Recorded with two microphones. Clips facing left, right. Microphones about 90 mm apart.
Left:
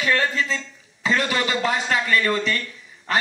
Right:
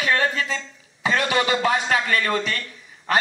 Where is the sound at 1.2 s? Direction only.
25° right (ahead or behind).